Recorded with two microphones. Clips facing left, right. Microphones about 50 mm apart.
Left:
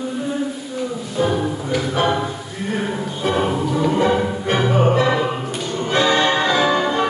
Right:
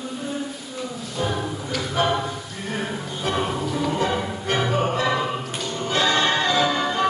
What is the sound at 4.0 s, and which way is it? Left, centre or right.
Music, centre.